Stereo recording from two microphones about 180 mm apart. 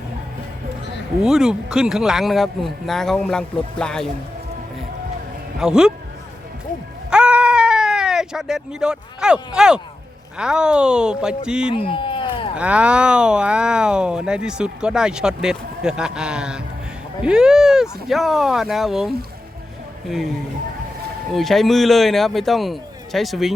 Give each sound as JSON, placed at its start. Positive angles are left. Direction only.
{"t": 1.2, "sound": "speech", "side_deg": -5}
{"t": 5.5, "sound": "speech", "side_deg": -5}
{"t": 7.1, "sound": "bleat", "side_deg": -5}
{"t": 10.3, "sound": "speech", "side_deg": -5}
{"t": 11.7, "sound": "speech", "side_deg": 30}
{"t": 12.5, "sound": "speech", "side_deg": -5}
{"t": 21.3, "sound": "speech", "side_deg": 0}